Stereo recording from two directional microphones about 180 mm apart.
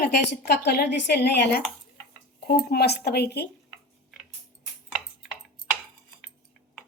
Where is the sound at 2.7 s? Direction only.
65° left (ahead or behind).